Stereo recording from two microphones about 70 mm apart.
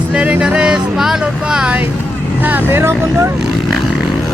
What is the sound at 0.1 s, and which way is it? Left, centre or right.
Vehicle, centre.